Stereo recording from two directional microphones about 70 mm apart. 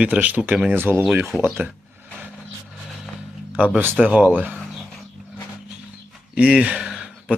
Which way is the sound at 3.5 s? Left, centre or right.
Centre.